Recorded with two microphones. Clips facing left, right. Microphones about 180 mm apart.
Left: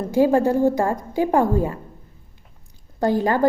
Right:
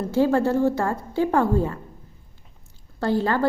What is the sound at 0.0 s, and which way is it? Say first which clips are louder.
A woman's voice: left 3 dB; 15° left (ahead or behind).